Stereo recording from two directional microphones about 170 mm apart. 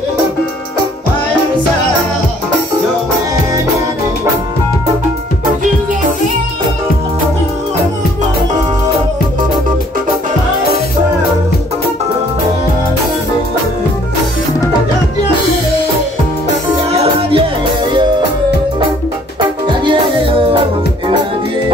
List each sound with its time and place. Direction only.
16.9 s music: 35° right (ahead or behind)
19.8 s music: 30° right (ahead or behind)